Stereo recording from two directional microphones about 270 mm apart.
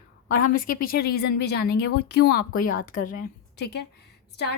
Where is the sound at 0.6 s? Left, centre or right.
Left.